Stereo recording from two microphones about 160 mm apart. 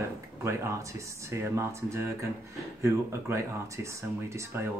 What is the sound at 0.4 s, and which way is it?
Speech, 15° right (ahead or behind).